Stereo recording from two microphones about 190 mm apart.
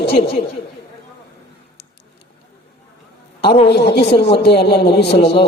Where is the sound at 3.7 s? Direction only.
60° left (ahead or behind).